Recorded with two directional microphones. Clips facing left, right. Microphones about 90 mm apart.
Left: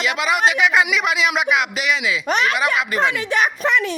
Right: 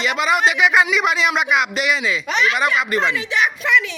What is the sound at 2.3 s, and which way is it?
Speech, 50° left (ahead or behind).